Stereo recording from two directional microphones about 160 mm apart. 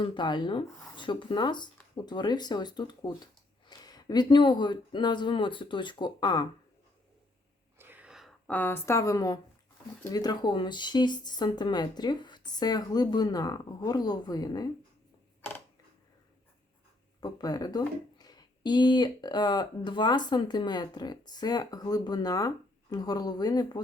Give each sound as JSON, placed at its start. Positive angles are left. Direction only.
{"t": 0.0, "sound": "speech", "side_deg": 30}
{"t": 7.8, "sound": "a sound", "side_deg": -10}
{"t": 8.4, "sound": "speech", "side_deg": 10}
{"t": 17.2, "sound": "speech", "side_deg": 25}